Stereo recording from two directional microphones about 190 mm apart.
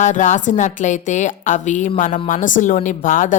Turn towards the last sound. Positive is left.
turn(degrees=45)  # may be behind; listen again after turning